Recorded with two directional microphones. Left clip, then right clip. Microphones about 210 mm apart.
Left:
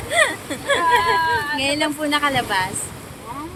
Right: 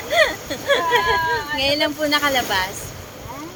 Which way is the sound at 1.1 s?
30° left (ahead or behind).